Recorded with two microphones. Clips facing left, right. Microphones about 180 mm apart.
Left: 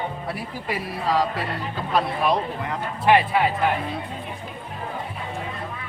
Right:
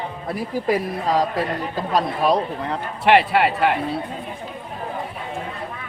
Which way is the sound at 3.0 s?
70° right (ahead or behind).